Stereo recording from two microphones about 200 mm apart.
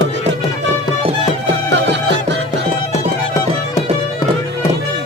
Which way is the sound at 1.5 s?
60° right (ahead or behind).